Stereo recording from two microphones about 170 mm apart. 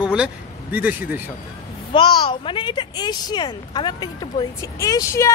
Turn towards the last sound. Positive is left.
turn(degrees=20)  # may be behind; listen again after turning